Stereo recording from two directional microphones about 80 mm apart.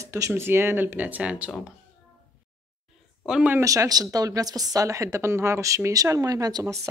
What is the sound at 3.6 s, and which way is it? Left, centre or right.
Speech, right.